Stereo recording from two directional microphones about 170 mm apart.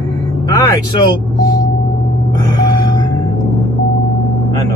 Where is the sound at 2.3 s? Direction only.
25° left (ahead or behind).